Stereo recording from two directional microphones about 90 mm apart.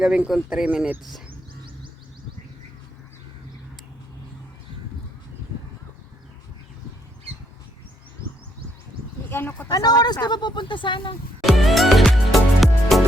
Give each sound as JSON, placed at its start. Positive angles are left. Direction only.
{"t": 0.0, "sound": "speech", "side_deg": -10}
{"t": 1.3, "sound": "bird", "side_deg": -70}
{"t": 8.2, "sound": "bird", "side_deg": 35}
{"t": 9.3, "sound": "speech", "side_deg": 20}
{"t": 9.6, "sound": "speech", "side_deg": 50}
{"t": 11.3, "sound": "music", "side_deg": 0}